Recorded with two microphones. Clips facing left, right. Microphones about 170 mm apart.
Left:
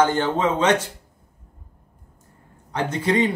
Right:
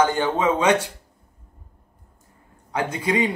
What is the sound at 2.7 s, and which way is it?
Speech, 10° right (ahead or behind).